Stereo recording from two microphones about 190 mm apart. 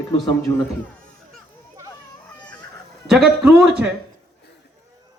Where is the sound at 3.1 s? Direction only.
5° right (ahead or behind).